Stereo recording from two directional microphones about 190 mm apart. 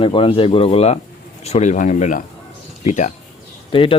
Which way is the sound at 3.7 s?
30° left (ahead or behind).